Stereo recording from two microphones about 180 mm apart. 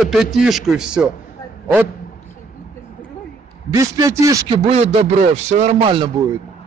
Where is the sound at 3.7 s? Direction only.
20° right (ahead or behind).